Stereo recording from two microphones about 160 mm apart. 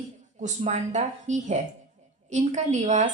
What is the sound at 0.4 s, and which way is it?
A woman's voice, 45° right (ahead or behind).